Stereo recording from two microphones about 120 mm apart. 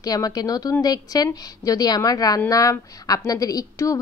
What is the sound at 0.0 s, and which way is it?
A woman's voice, 30° left (ahead or behind).